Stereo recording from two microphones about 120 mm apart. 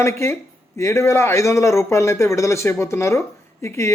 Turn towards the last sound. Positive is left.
turn(degrees=25)  # may be behind; listen again after turning